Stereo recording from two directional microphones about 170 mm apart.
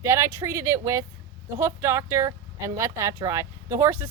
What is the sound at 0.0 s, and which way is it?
Speech, 15° right (ahead or behind).